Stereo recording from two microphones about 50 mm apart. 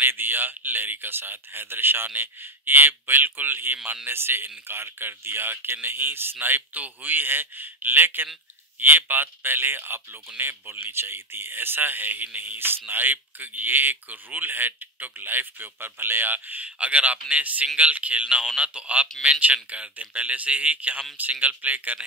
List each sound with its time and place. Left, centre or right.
0.0 s speech: right
3.7 s speech: right
4.1 s speech: right